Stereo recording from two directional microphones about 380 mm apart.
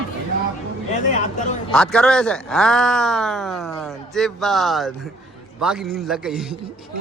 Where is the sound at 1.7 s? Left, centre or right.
Centre.